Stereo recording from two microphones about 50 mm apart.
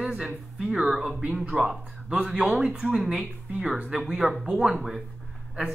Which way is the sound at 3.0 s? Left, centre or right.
Centre.